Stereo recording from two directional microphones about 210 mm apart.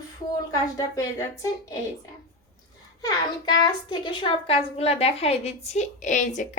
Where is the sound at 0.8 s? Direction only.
15° left (ahead or behind).